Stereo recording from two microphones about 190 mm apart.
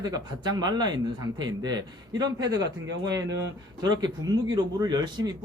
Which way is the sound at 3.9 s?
20° right (ahead or behind).